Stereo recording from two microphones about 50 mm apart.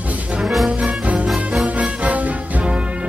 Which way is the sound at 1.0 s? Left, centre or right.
Right.